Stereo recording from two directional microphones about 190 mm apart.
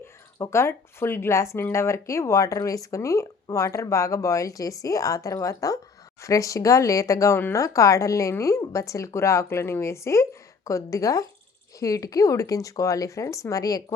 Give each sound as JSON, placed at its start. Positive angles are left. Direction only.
{"t": 0.3, "sound": "speech", "side_deg": 15}